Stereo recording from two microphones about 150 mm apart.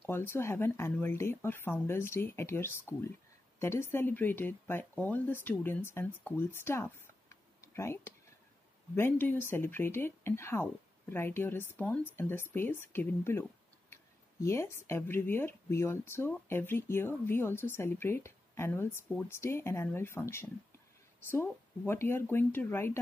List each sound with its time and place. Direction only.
0.0 s speech: 15° left (ahead or behind)
21.8 s speech: 15° left (ahead or behind)